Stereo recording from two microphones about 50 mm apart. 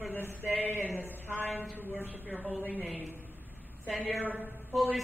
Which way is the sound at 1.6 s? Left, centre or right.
Right.